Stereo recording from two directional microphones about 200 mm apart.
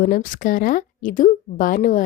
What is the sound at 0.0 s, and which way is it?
A woman's voice, 40° left (ahead or behind).